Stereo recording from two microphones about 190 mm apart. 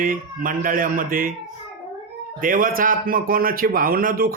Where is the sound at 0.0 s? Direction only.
45° right (ahead or behind).